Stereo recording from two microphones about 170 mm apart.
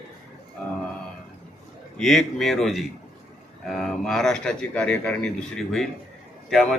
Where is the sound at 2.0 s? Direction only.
Centre (ahead or behind).